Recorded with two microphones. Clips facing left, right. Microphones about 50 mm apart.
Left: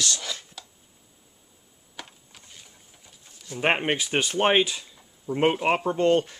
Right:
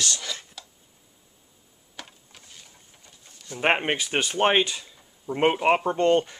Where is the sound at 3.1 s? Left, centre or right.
Centre.